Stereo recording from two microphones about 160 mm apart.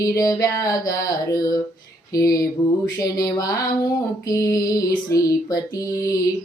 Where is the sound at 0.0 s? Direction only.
20° left (ahead or behind).